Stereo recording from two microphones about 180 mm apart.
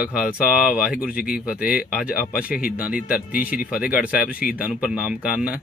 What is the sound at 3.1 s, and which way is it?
Speech, 55° left (ahead or behind).